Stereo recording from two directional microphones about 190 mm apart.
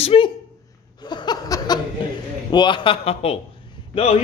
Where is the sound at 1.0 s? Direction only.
20° left (ahead or behind).